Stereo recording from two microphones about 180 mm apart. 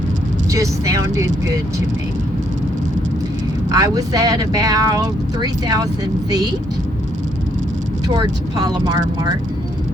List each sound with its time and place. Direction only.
0.5 s speech: 20° right (ahead or behind)
3.7 s speech: 20° right (ahead or behind)
8.0 s speech: 20° right (ahead or behind)